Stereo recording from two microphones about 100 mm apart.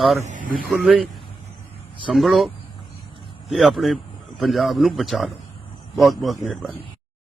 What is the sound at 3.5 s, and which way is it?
A man's voice, centre (ahead or behind).